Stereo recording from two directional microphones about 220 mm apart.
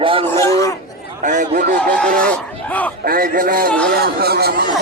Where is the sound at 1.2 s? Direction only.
35° right (ahead or behind).